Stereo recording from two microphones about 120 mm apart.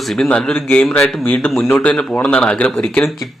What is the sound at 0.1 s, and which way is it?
Speech, 5° left (ahead or behind).